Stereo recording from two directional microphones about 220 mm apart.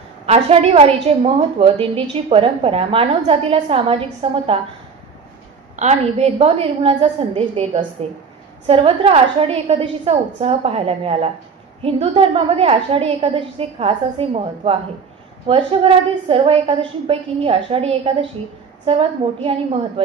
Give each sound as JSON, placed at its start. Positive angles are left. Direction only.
{"t": 0.3, "sound": "a woman's voice", "side_deg": -30}
{"t": 5.8, "sound": "a woman's voice", "side_deg": -30}